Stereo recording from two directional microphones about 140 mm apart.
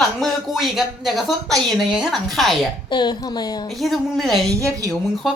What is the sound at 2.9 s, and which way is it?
Speech, 30° left (ahead or behind).